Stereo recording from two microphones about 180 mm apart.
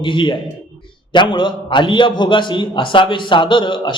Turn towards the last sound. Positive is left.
turn(degrees=25)  # may be behind; listen again after turning